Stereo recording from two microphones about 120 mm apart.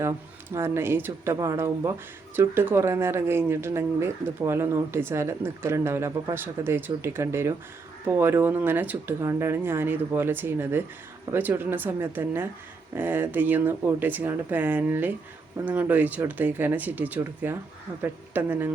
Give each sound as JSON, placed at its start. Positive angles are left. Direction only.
{"t": 0.5, "sound": "speech", "side_deg": -20}